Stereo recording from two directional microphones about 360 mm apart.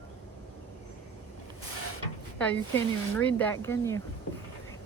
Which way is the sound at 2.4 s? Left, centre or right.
Centre.